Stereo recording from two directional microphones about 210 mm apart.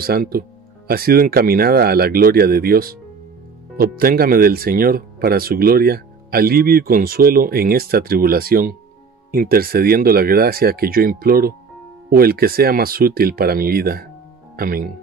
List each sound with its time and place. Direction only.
0.0 s speech: 45° right (ahead or behind)